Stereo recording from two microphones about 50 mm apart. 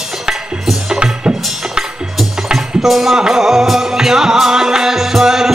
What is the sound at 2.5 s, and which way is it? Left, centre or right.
Music, centre.